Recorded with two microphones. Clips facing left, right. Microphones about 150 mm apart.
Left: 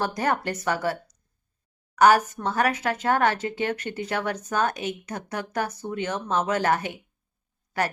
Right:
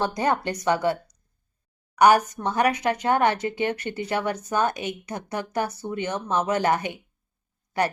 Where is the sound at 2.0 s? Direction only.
15° right (ahead or behind).